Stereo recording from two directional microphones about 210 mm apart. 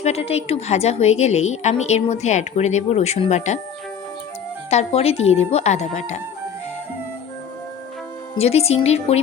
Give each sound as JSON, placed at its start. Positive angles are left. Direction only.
{"t": 0.0, "sound": "a woman's voice", "side_deg": 30}
{"t": 4.7, "sound": "a woman's voice", "side_deg": 30}
{"t": 8.4, "sound": "speech", "side_deg": 30}